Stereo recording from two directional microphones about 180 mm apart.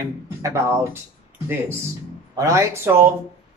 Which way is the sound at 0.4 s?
15° right (ahead or behind).